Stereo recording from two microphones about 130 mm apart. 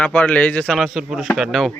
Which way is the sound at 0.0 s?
10° left (ahead or behind).